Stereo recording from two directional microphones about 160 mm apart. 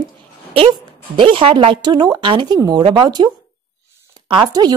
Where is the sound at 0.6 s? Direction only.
30° right (ahead or behind).